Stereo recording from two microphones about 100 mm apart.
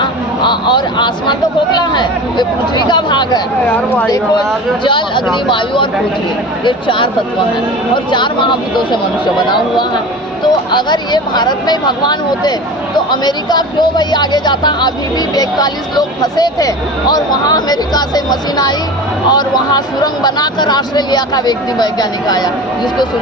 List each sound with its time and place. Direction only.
0.0 s speech: 50° left (ahead or behind)
3.7 s speech: 10° left (ahead or behind)
4.8 s speech: 50° left (ahead or behind)
8.1 s speech: 50° left (ahead or behind)
10.7 s speech: 50° left (ahead or behind)